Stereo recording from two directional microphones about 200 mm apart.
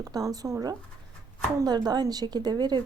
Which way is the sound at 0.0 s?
15° right (ahead or behind).